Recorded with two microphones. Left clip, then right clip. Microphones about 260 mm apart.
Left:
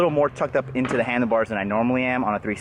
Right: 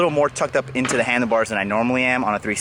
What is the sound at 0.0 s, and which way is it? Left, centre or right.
Speech, centre.